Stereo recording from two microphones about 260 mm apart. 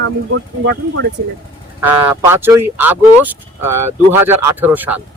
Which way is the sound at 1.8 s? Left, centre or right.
Centre.